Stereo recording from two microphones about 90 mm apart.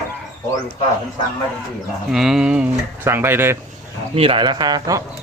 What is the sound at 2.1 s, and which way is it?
Speech, 5° right (ahead or behind).